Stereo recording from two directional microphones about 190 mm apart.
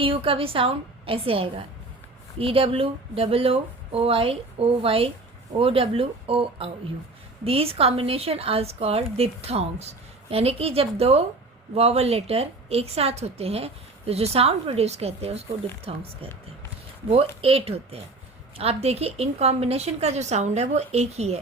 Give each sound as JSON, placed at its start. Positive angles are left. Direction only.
{"t": 0.0, "sound": "speech", "side_deg": -30}
{"t": 17.1, "sound": "speech", "side_deg": -30}